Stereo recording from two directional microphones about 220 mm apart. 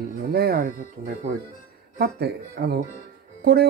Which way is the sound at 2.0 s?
45° right (ahead or behind).